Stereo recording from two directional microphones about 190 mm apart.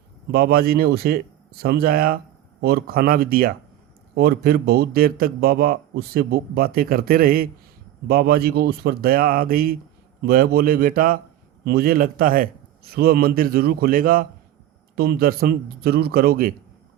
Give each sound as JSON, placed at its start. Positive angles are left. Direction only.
{"t": 0.3, "sound": "speech", "side_deg": -55}